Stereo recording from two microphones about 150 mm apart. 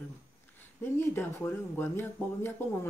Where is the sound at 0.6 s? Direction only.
15° left (ahead or behind).